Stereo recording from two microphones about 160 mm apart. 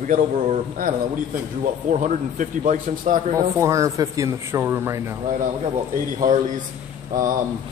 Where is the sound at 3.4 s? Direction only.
20° right (ahead or behind).